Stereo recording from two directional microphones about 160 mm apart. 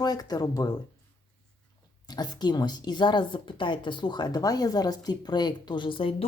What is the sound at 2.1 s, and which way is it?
Speech, 25° left (ahead or behind).